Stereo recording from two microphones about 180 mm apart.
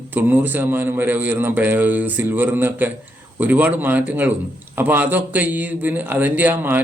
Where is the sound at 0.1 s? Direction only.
10° right (ahead or behind).